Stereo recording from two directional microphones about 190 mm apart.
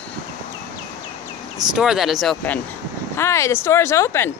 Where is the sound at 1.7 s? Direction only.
Centre (ahead or behind).